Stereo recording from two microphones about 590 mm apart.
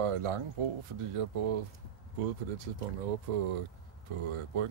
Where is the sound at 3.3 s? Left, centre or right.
Right.